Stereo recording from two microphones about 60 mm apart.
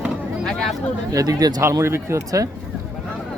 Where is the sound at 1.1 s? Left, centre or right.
Right.